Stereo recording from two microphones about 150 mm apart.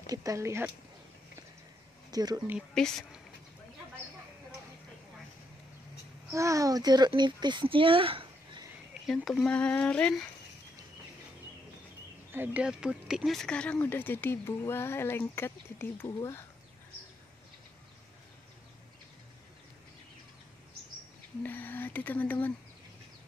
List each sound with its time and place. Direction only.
0.0 s a child's voice: 25° right (ahead or behind)
2.0 s speech: 25° right (ahead or behind)
2.7 s a woman's voice: centre (ahead or behind)
6.3 s a child's voice: 20° right (ahead or behind); by 8.6 s 35° right (ahead or behind)
9.0 s speech: centre (ahead or behind)
12.3 s speech: 10° right (ahead or behind); by 16.4 s 20° left (ahead or behind)
21.4 s speech: 10° left (ahead or behind)